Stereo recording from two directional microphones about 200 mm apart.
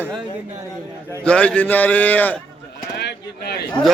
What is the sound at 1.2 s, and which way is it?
A man's voice, 5° left (ahead or behind).